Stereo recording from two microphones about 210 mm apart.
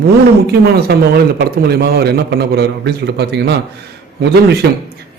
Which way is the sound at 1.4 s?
50° right (ahead or behind).